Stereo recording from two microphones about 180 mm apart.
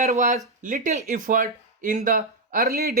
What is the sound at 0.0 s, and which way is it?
Speech, 40° right (ahead or behind).